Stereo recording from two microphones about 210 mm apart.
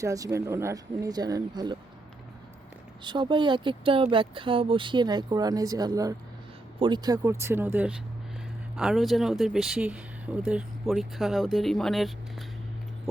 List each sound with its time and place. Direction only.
0.0 s speech: 15° right (ahead or behind)
3.0 s speech: 20° right (ahead or behind); by 12.5 s centre (ahead or behind)